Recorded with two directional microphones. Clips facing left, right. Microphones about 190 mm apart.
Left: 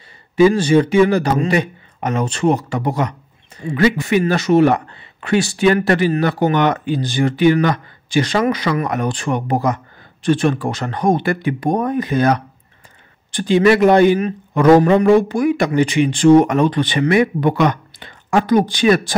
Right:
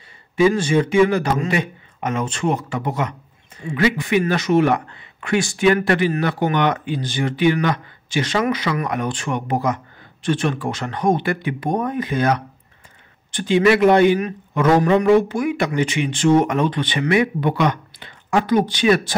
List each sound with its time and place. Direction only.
0.4 s a man's voice: 35° left (ahead or behind)